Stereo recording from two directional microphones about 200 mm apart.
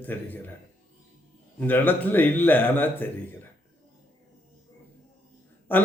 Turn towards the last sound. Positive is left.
turn(degrees=10)  # may be behind; listen again after turning